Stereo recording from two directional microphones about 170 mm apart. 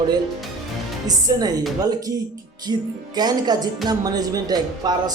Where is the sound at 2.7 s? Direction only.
25° right (ahead or behind).